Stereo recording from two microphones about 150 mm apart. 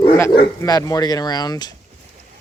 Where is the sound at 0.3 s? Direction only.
25° left (ahead or behind).